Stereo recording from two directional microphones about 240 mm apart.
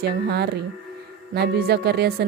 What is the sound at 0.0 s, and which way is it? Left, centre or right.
Speech, right.